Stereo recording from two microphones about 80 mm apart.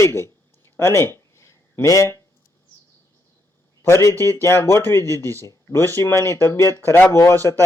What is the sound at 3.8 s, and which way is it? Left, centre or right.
A man's voice, left.